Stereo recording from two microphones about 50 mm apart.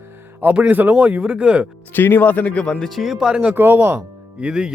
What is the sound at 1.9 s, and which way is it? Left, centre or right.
Speech, left.